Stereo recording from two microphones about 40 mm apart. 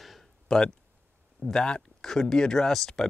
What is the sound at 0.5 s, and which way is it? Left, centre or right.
Speech, centre.